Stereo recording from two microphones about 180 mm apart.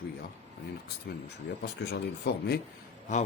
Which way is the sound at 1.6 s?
65° left (ahead or behind).